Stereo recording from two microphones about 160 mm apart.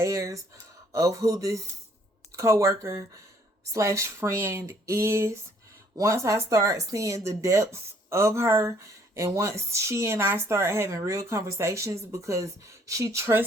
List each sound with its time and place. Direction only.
0.0 s speech: 20° right (ahead or behind)